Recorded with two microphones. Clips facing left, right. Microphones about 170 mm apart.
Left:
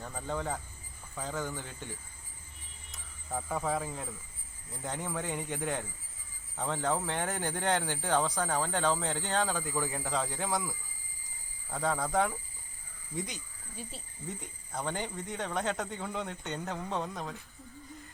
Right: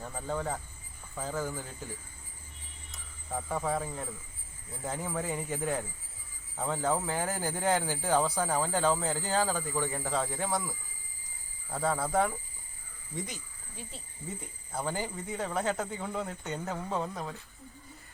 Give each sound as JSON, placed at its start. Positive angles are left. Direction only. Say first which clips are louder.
{"t": 0.0, "sound": "speech", "louder": "right 1 dB", "side_deg": 0}